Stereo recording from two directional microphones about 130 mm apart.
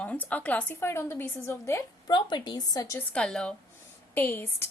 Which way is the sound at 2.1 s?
35° left (ahead or behind).